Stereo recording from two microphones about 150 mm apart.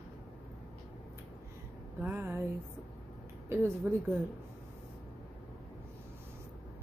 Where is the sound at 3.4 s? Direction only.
15° right (ahead or behind).